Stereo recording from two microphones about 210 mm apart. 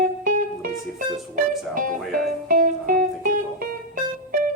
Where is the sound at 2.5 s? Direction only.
40° right (ahead or behind).